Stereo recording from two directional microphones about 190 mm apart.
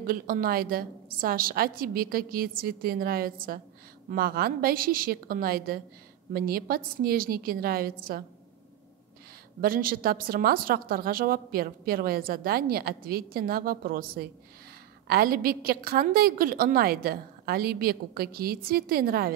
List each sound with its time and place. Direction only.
0.0 s a woman's voice: 50° right (ahead or behind)
9.6 s a woman's voice: 50° right (ahead or behind)